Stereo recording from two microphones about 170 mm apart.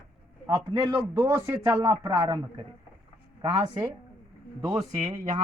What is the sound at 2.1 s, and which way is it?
Speech, 15° right (ahead or behind).